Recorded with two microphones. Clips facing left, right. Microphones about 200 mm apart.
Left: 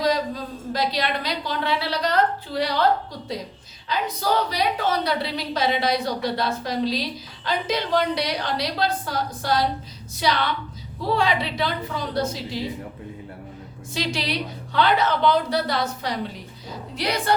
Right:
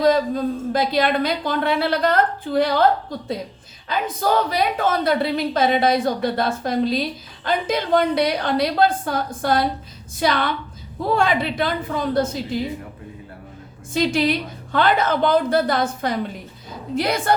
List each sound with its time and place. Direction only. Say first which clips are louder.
0.0 s a woman's voice: right 6 dB; 50° right (ahead or behind)
13.9 s a woman's voice: right 8 dB; 50° right (ahead or behind)